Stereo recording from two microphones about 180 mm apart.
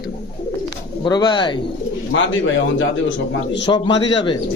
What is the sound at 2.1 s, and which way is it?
Speech, 90° left.